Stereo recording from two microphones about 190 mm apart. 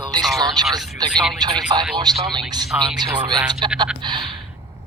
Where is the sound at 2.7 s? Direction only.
5° right (ahead or behind).